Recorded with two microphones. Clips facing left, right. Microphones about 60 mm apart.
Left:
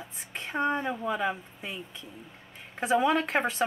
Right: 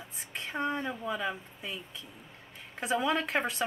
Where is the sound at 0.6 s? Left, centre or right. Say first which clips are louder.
Left 5 dB; left.